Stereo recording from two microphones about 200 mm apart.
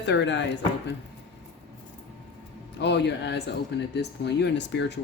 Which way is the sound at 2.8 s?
60° left (ahead or behind).